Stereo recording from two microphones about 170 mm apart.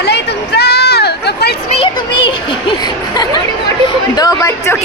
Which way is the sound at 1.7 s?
30° left (ahead or behind).